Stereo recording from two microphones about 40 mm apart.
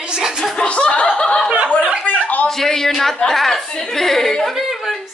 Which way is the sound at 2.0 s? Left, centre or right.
Left.